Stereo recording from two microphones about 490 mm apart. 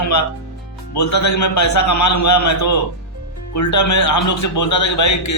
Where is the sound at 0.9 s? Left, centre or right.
Left.